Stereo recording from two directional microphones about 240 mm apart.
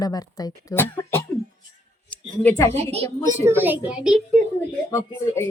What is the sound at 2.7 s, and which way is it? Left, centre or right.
Speech, right.